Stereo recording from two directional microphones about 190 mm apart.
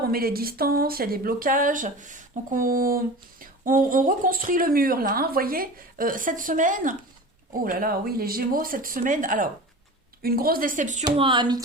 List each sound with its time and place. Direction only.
0.0 s speech: 50° right (ahead or behind)
11.0 s speech: 25° right (ahead or behind)